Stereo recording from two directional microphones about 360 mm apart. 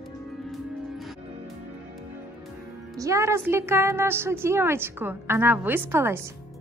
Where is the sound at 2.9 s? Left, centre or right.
Centre.